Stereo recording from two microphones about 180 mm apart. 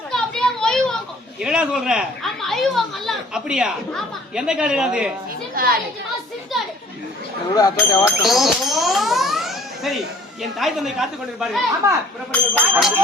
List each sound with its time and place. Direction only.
0.1 s children playing: 5° left (ahead or behind)
5.6 s a child's voice: 55° right (ahead or behind)
7.5 s speech: 20° left (ahead or behind)
8.2 s a woman's voice: centre (ahead or behind)
11.8 s speech: 15° right (ahead or behind)
12.3 s speech: 5° left (ahead or behind)